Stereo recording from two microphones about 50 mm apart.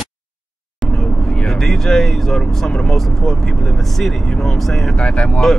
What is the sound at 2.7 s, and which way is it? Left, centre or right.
Speech, centre.